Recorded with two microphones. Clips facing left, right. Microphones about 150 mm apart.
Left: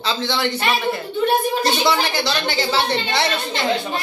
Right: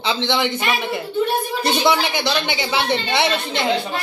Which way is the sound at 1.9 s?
15° right (ahead or behind).